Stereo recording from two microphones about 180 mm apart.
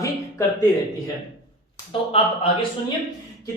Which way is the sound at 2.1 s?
30° left (ahead or behind).